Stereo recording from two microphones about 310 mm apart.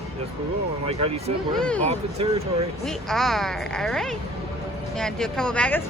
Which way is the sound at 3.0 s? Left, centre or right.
Centre.